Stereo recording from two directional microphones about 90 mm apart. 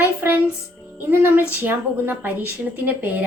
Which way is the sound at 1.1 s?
25° right (ahead or behind).